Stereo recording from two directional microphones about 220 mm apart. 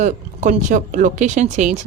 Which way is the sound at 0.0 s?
35° right (ahead or behind).